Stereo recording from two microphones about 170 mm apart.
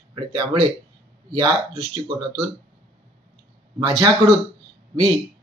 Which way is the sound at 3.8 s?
25° right (ahead or behind).